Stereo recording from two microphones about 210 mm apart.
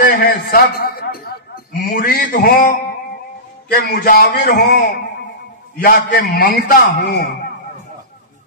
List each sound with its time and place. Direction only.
0.0 s a man's voice: 45° left (ahead or behind)